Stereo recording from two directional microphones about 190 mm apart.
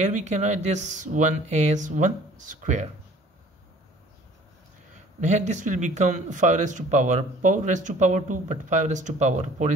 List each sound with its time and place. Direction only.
0.0 s speech: 35° right (ahead or behind)
5.2 s speech: 40° right (ahead or behind)